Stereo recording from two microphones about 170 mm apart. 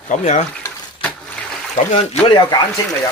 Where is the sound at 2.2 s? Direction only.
25° left (ahead or behind).